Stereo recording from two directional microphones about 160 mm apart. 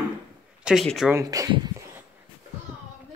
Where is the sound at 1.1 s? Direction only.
20° right (ahead or behind).